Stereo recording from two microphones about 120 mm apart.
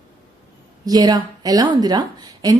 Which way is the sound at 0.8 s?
35° right (ahead or behind).